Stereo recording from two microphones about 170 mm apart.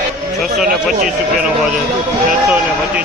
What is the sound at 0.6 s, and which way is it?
Speech, 55° right (ahead or behind).